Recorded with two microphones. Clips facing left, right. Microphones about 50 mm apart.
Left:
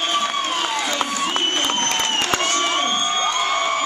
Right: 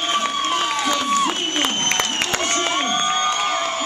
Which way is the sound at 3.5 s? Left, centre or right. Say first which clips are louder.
Left 2 dB; left.